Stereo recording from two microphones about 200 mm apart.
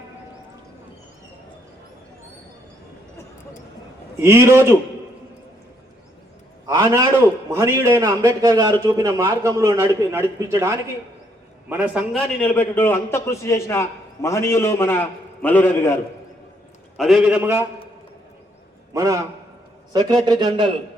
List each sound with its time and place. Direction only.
4.2 s a man's voice: 15° right (ahead or behind)
6.7 s a sound: 15° right (ahead or behind)
7.5 s a man's voice: 15° right (ahead or behind)
12.1 s a man's voice: 5° left (ahead or behind)
17.0 s a man's voice: centre (ahead or behind)
18.9 s a man's voice: 15° right (ahead or behind)